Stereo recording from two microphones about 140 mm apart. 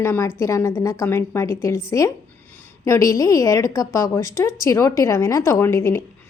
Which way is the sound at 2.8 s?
25° left (ahead or behind).